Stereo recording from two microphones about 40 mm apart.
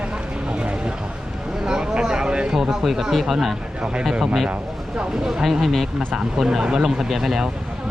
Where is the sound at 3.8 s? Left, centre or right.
Right.